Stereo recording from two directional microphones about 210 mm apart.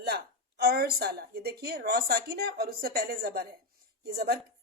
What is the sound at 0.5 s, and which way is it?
A woman's voice, 50° right (ahead or behind).